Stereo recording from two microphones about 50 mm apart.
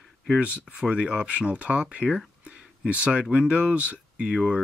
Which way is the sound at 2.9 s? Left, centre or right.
Right.